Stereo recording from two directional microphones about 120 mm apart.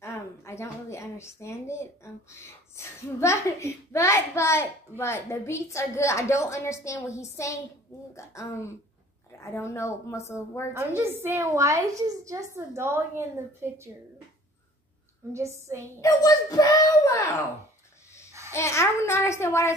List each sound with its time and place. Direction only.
0.0 s a sound: 20° left (ahead or behind)
2.7 s a child's voice: 20° left (ahead or behind)
10.7 s a woman's voice: 20° right (ahead or behind)
15.3 s a woman's voice: 25° right (ahead or behind)
16.0 s a child's voice: 30° left (ahead or behind)
18.5 s a child's voice: 25° left (ahead or behind)